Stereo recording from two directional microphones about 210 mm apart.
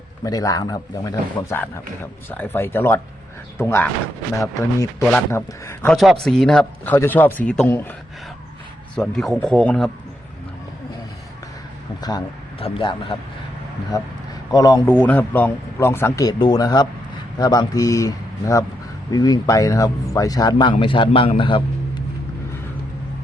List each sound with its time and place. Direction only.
0.3 s speech: 15° left (ahead or behind)
9.0 s speech: centre (ahead or behind)
11.9 s speech: 20° left (ahead or behind)